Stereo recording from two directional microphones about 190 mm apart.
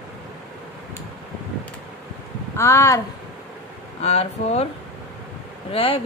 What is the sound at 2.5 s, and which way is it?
Speech, 15° left (ahead or behind).